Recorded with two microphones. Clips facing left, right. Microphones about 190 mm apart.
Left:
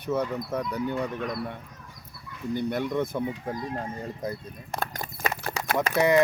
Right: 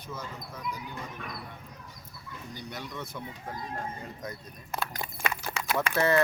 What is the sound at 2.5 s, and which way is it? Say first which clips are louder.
Speech: left 14 dB; 55° left (ahead or behind).